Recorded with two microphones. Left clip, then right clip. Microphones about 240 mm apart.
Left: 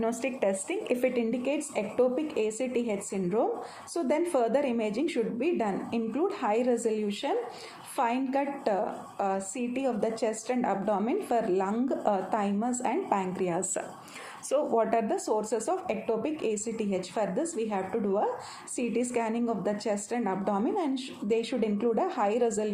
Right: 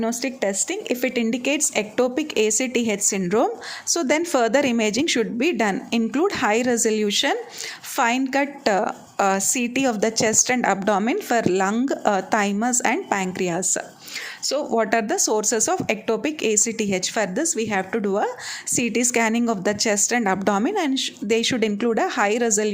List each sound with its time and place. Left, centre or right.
0.0 s a woman's voice: right